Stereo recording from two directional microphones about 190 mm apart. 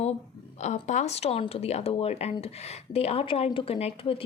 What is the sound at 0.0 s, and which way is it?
A woman's voice, 35° left (ahead or behind).